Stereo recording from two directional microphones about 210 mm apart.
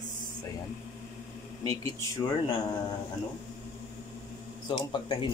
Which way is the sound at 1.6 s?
15° left (ahead or behind).